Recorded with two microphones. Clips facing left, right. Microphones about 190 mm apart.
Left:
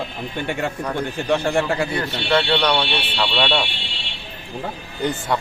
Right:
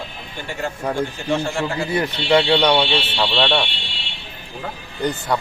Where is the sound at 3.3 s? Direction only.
Centre (ahead or behind).